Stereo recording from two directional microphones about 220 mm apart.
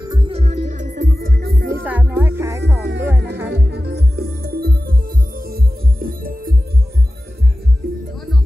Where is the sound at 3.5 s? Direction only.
50° right (ahead or behind).